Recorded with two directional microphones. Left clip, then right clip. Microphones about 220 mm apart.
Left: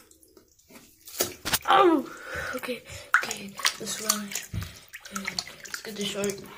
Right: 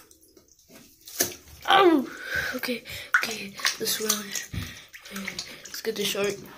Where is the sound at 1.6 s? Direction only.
Centre (ahead or behind).